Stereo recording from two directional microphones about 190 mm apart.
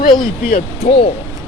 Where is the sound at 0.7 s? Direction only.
30° left (ahead or behind).